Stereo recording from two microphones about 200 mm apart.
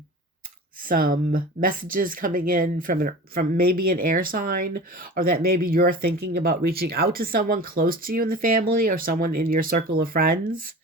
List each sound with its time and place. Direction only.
0.8 s speech: 45° right (ahead or behind)